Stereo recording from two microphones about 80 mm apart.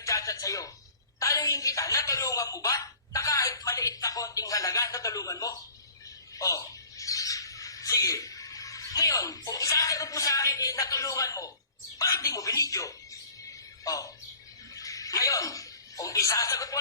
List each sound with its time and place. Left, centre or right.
0.0 s music: left
1.2 s a woman's voice: left